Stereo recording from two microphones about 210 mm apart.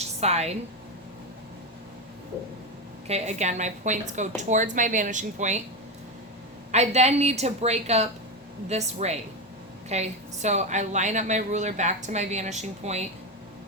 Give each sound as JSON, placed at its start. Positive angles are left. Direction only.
{"t": 0.2, "sound": "a woman's voice", "side_deg": -30}
{"t": 3.1, "sound": "a woman's voice", "side_deg": -30}
{"t": 6.7, "sound": "a woman's voice", "side_deg": -30}